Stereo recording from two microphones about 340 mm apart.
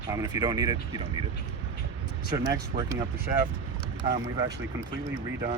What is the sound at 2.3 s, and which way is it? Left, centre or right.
Speech, centre.